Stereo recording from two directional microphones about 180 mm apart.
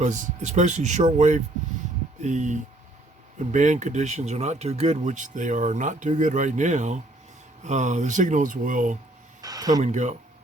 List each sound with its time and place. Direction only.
0.0 s speech: 40° right (ahead or behind)
9.4 s speech: 20° right (ahead or behind)
9.8 s speech: 40° right (ahead or behind)